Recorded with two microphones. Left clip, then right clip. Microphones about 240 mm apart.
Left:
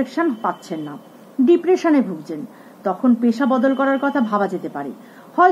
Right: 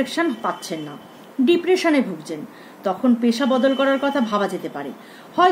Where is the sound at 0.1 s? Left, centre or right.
Right.